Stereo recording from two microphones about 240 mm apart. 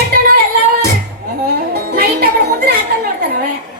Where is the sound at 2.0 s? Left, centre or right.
Right.